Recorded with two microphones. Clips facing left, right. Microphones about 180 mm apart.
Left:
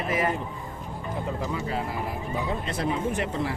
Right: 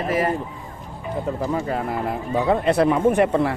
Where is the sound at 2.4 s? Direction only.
65° right (ahead or behind).